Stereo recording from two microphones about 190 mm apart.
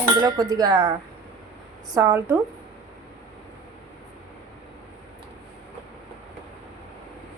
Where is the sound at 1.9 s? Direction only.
15° right (ahead or behind).